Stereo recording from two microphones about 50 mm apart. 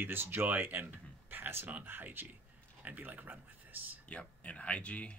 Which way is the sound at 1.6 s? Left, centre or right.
Right.